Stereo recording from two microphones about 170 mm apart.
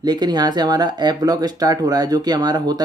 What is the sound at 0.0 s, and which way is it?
Speech, 25° right (ahead or behind).